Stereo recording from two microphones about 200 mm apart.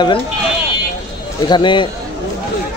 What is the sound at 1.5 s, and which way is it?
Speech, 25° left (ahead or behind).